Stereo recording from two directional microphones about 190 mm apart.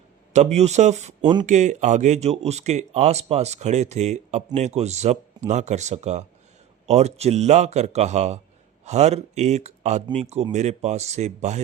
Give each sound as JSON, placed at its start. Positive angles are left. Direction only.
{"t": 0.3, "sound": "speech", "side_deg": -35}
{"t": 1.2, "sound": "speech", "side_deg": -25}
{"t": 1.5, "sound": "speech", "side_deg": -40}